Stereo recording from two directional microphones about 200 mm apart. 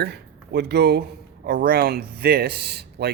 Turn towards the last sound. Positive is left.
turn(degrees=-55)  # may be behind; listen again after turning